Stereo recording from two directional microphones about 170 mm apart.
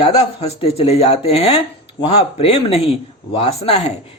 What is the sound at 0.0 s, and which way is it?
Speech, 35° left (ahead or behind).